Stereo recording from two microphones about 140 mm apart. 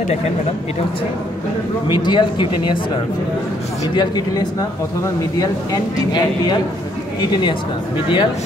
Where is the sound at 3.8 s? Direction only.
30° left (ahead or behind).